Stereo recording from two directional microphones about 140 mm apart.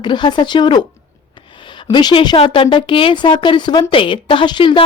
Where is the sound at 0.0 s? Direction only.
35° left (ahead or behind).